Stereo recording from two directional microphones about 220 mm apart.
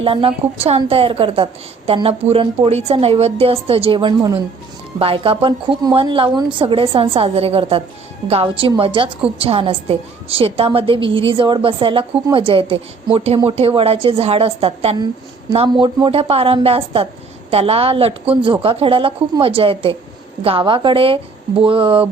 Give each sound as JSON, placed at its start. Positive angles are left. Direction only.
{"t": 0.0, "sound": "a woman's voice", "side_deg": -25}